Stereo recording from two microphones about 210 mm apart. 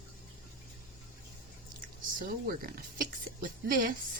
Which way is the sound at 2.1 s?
45° right (ahead or behind).